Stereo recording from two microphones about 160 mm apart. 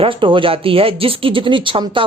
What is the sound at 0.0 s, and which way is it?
A man's voice, 35° right (ahead or behind).